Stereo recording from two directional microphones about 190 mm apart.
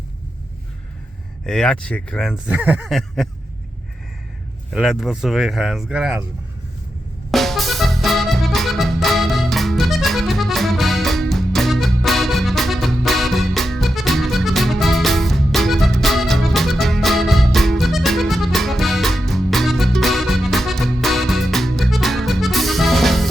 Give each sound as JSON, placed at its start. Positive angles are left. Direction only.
{"t": 1.5, "sound": "speech", "side_deg": 5}
{"t": 4.7, "sound": "speech", "side_deg": 0}
{"t": 7.3, "sound": "music", "side_deg": 0}